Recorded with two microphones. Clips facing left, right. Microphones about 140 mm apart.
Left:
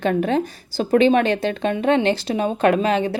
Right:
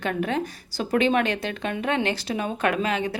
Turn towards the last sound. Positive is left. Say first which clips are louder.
# left 7 dB
turn(degrees=30)  # may be behind; listen again after turning